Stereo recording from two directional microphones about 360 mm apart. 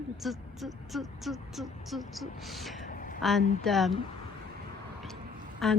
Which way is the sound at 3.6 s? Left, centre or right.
Centre.